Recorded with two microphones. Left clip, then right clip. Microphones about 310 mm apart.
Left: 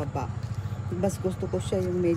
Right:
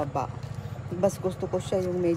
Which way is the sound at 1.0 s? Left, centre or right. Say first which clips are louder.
Right 3 dB; right.